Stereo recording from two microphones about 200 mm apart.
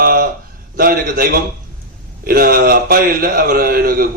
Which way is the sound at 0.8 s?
45° right (ahead or behind).